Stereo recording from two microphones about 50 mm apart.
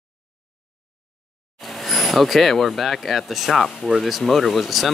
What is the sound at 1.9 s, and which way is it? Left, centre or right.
Speech, centre.